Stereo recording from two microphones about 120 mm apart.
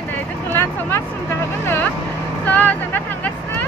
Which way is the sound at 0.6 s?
20° left (ahead or behind).